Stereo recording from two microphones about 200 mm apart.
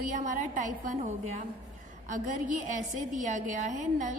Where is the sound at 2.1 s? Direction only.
40° right (ahead or behind).